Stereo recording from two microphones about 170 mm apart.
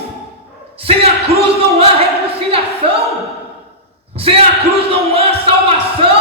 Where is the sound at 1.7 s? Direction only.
35° right (ahead or behind).